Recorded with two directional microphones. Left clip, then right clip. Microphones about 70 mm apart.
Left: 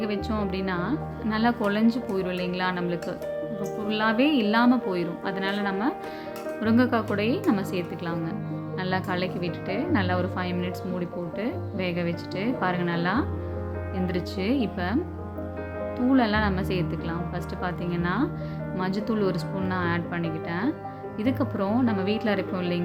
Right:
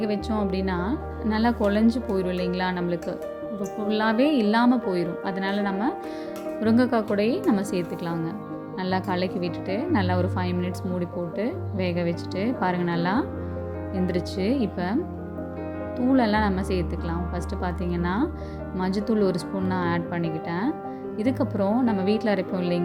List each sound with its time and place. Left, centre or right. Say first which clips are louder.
0.0 s speech: right 2 dB; right
16.0 s speech: right 1 dB; right